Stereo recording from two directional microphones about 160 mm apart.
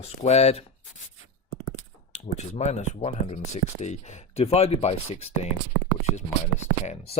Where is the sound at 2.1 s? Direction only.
45° left (ahead or behind).